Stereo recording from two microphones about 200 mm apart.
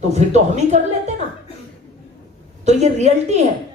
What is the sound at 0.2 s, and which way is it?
Speech, 35° right (ahead or behind).